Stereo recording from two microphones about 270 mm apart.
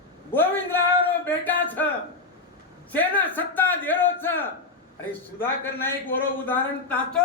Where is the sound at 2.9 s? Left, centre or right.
Centre.